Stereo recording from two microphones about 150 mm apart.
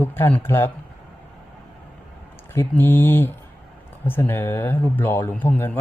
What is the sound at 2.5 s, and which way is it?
Speech, 15° left (ahead or behind).